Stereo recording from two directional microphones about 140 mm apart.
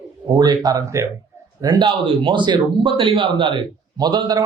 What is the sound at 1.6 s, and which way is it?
A man's voice, 30° right (ahead or behind).